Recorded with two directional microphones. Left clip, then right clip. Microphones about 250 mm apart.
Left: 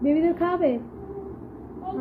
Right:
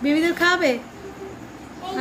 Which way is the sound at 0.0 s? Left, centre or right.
Right.